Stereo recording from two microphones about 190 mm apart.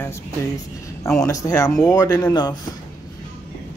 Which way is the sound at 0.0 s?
15° left (ahead or behind).